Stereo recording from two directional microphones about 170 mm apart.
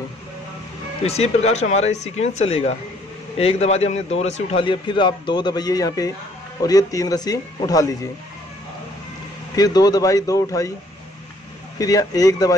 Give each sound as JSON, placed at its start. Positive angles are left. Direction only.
{"t": 1.0, "sound": "speech", "side_deg": 40}
{"t": 4.6, "sound": "a man's voice", "side_deg": 25}
{"t": 9.6, "sound": "a man's voice", "side_deg": 20}
{"t": 11.8, "sound": "a man's voice", "side_deg": 20}